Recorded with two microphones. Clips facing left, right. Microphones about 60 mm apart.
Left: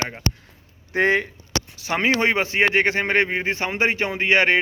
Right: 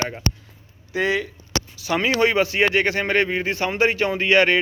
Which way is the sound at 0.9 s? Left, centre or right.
Left.